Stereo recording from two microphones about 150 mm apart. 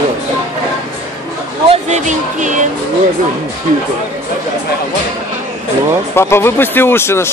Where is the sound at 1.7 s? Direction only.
50° right (ahead or behind).